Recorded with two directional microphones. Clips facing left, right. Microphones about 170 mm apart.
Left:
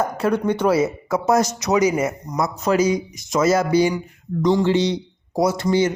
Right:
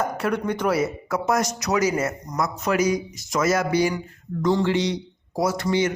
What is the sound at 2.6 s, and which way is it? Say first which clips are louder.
A man's voice: left 4 dB; 30° left (ahead or behind).